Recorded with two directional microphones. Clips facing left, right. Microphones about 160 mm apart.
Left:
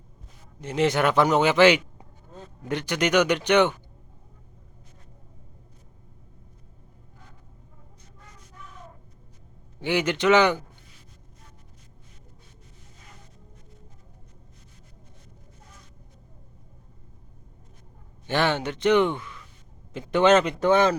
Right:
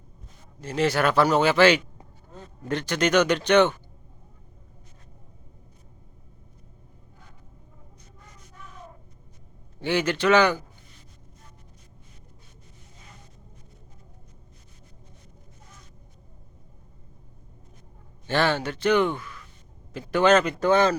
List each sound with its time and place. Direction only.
0.6 s a man's voice: 20° left (ahead or behind)
9.8 s a man's voice: 15° left (ahead or behind)
18.3 s a man's voice: 15° left (ahead or behind)